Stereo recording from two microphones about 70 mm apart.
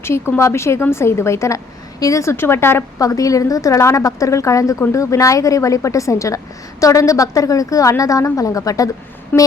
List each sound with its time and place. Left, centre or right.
0.0 s a woman's voice: left
2.3 s a woman's voice: left
3.0 s a woman's voice: left
9.3 s a sound: left